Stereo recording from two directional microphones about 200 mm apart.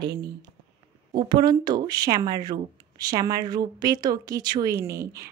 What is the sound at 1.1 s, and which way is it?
A woman's voice, 20° right (ahead or behind).